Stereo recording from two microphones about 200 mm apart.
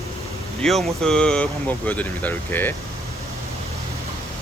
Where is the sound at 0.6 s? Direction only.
Centre (ahead or behind).